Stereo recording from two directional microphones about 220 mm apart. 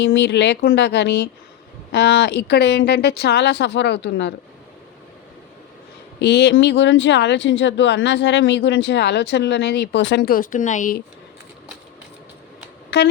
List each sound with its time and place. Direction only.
0.0 s speech: 55° left (ahead or behind)
6.1 s speech: 50° left (ahead or behind); by 11.0 s 35° left (ahead or behind)
12.9 s speech: 50° left (ahead or behind)